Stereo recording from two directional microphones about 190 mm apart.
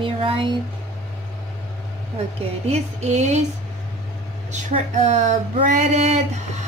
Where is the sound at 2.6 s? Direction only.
35° right (ahead or behind).